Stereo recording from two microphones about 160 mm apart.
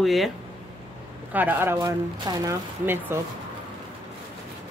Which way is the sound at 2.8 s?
15° right (ahead or behind).